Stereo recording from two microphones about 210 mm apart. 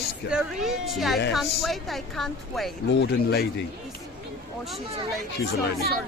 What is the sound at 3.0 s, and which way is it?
Speech, 50° left (ahead or behind).